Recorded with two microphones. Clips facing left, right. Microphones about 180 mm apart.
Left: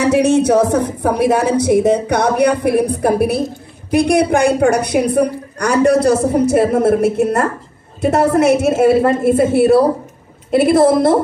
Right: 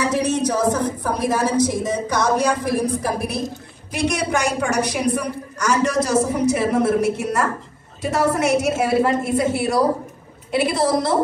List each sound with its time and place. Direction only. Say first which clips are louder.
0.0 s a woman's voice: left 8 dB; 70° left (ahead or behind); by 11.1 s 55° left (ahead or behind)